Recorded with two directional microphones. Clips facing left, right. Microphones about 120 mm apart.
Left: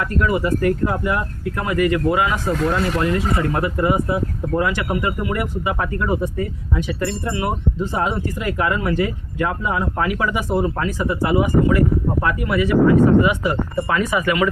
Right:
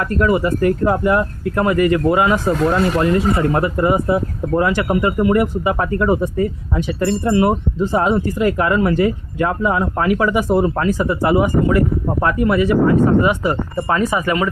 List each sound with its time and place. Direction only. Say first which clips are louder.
0.2 s speech: right 3 dB; 35° right (ahead or behind)